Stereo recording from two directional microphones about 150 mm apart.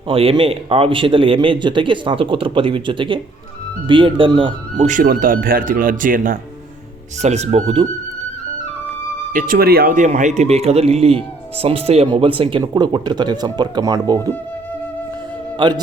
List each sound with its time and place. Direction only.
0.1 s speech: 40° right (ahead or behind)
4.9 s speech: 65° right (ahead or behind)
7.2 s speech: 50° right (ahead or behind)
9.3 s speech: 80° right; by 14.3 s 25° right (ahead or behind)
15.5 s speech: 30° right (ahead or behind)